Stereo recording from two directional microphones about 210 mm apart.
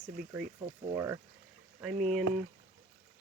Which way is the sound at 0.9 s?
10° right (ahead or behind).